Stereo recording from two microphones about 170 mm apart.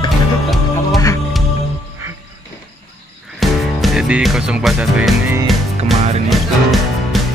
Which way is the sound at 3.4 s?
Centre (ahead or behind).